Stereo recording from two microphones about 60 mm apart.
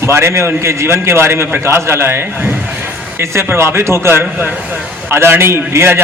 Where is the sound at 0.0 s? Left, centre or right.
Right.